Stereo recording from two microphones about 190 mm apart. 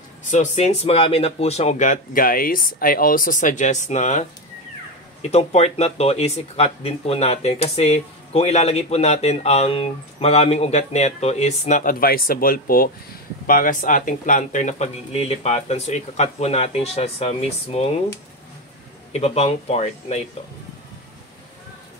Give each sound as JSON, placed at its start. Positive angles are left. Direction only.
{"t": 0.2, "sound": "speech", "side_deg": 40}
{"t": 5.3, "sound": "speech", "side_deg": 35}
{"t": 19.1, "sound": "speech", "side_deg": 35}